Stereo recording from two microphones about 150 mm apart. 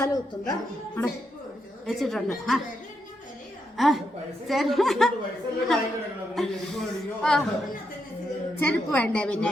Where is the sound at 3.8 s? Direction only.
Centre (ahead or behind).